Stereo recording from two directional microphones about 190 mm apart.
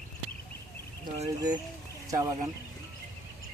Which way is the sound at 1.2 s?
20° right (ahead or behind).